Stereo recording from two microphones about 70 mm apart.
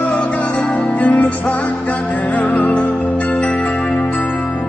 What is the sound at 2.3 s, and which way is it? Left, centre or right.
Music, left.